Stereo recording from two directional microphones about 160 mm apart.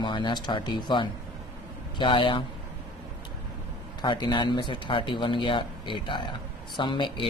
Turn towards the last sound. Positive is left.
turn(degrees=30)  # may be behind; listen again after turning